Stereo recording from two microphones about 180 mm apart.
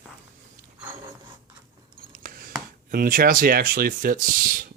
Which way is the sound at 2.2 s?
50° right (ahead or behind).